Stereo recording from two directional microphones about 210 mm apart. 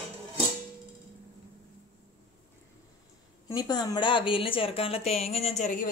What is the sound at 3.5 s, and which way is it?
A woman's voice, 20° left (ahead or behind).